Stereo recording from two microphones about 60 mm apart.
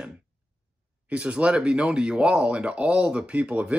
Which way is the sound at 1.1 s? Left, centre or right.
Right.